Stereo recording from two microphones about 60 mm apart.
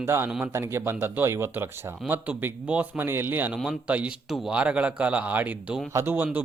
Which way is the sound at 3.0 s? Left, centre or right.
Right.